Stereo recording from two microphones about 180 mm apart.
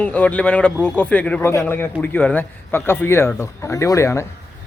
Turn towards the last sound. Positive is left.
turn(degrees=15)  # may be behind; listen again after turning